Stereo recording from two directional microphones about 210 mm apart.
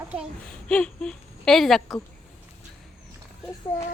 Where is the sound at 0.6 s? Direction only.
5° left (ahead or behind).